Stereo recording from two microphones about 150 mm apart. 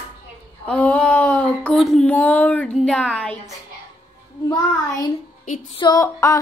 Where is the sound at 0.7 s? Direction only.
10° left (ahead or behind).